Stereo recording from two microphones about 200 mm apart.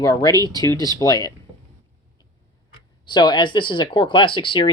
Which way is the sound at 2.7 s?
20° left (ahead or behind).